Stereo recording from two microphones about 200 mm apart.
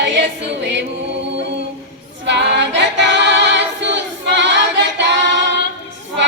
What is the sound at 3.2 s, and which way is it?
Choir, 60° right (ahead or behind).